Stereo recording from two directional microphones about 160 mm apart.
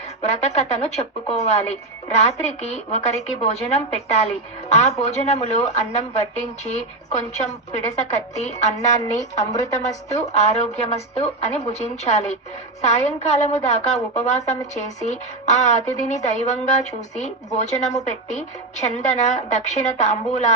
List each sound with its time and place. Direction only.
0.3 s a woman's voice: 45° left (ahead or behind)
9.0 s speech: 20° left (ahead or behind)
9.8 s a woman's voice: 45° left (ahead or behind)